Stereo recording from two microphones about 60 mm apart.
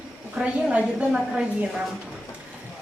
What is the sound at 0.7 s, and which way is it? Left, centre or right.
Speech, centre.